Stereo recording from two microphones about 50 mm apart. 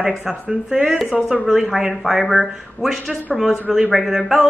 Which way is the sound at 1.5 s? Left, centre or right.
Centre.